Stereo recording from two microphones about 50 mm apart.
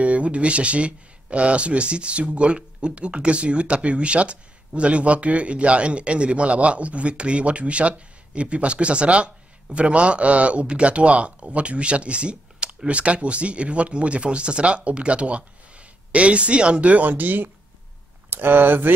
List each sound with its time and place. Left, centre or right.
0.0 s speech: right